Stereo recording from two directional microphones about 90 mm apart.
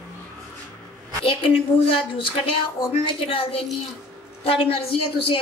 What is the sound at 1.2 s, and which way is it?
A woman's voice, 90° left.